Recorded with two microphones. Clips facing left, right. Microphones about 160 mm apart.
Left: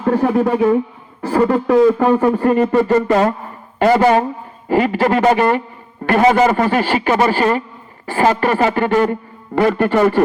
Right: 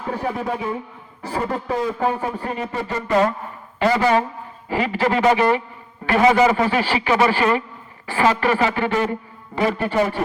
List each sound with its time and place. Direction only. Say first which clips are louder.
0.0 s speech: left 10 dB; 60° left (ahead or behind)
3.8 s music: left 5 dB; 50° left (ahead or behind)
9.6 s speech: left 6 dB; 60° left (ahead or behind)